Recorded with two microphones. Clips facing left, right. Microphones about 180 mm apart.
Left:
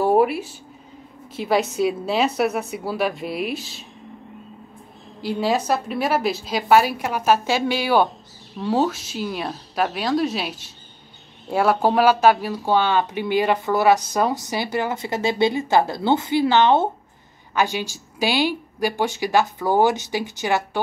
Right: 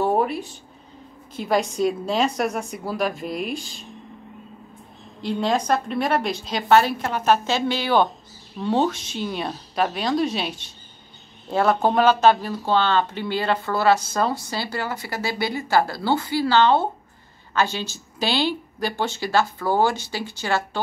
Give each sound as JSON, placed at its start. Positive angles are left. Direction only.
{"t": 0.0, "sound": "a woman's voice", "side_deg": 5}
{"t": 5.2, "sound": "a woman's voice", "side_deg": 5}